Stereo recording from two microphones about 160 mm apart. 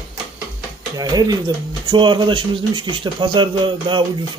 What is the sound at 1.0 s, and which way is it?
Speech, 25° right (ahead or behind).